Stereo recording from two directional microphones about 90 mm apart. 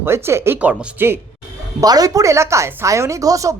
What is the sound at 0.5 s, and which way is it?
Speech, 15° right (ahead or behind).